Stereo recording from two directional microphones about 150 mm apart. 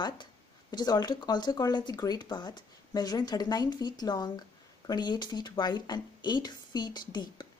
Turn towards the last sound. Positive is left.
turn(degrees=30)  # may be behind; listen again after turning